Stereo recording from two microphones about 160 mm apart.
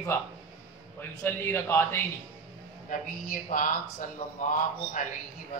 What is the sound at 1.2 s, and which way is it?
Speech, 15° left (ahead or behind).